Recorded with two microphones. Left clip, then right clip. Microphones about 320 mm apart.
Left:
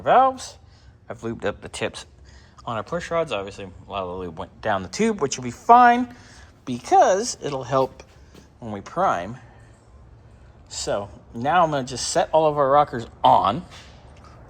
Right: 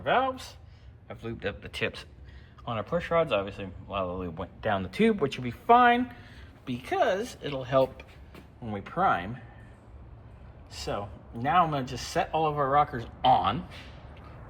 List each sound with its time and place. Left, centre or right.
0.0 s speech: left
0.3 s speech: left
1.6 s speech: centre
10.7 s speech: centre